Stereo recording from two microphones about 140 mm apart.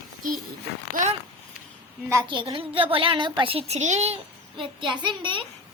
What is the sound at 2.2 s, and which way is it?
A child's voice, 35° right (ahead or behind).